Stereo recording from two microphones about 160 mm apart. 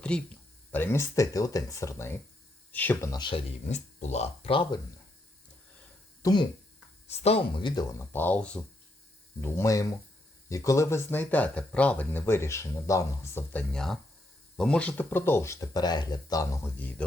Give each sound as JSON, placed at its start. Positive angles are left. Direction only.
{"t": 0.0, "sound": "speech", "side_deg": 5}
{"t": 3.1, "sound": "speech", "side_deg": 30}
{"t": 3.7, "sound": "speech", "side_deg": 45}
{"t": 6.2, "sound": "speech", "side_deg": 25}
{"t": 7.1, "sound": "speech", "side_deg": 40}
{"t": 9.4, "sound": "speech", "side_deg": 20}